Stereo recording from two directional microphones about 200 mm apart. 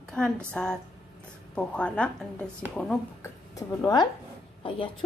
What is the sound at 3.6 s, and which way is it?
Speech, 20° left (ahead or behind).